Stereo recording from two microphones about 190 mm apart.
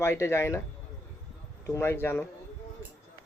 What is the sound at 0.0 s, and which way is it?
Speech, 15° left (ahead or behind).